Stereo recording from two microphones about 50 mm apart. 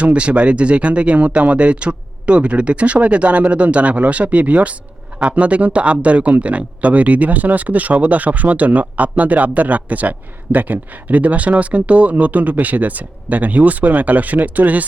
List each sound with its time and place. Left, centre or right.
0.0 s speech: right